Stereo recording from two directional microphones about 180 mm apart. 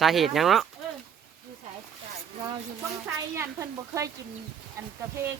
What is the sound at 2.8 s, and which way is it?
Speech, 10° right (ahead or behind).